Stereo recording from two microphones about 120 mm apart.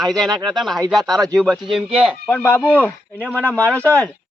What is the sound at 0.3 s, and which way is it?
Speech, 35° right (ahead or behind).